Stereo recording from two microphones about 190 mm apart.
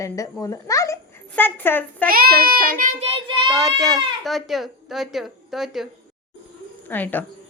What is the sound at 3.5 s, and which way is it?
Speech, centre (ahead or behind).